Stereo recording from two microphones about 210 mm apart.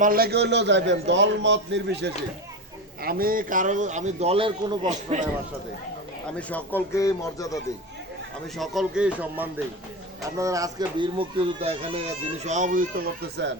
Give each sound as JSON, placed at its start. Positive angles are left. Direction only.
{"t": 0.0, "sound": "a man's voice", "side_deg": -45}
{"t": 6.5, "sound": "speech", "side_deg": 10}
{"t": 8.5, "sound": "speech", "side_deg": 0}